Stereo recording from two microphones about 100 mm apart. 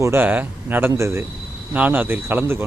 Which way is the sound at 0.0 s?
25° right (ahead or behind).